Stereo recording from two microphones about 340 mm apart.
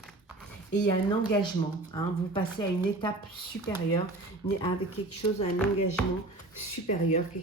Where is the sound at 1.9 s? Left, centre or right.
Centre.